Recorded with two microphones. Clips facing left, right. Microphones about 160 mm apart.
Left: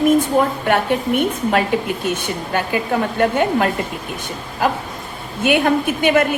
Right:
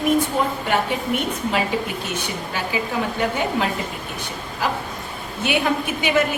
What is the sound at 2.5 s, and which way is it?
Speech, 55° left (ahead or behind).